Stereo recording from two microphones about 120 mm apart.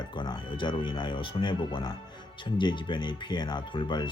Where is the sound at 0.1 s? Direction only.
40° left (ahead or behind).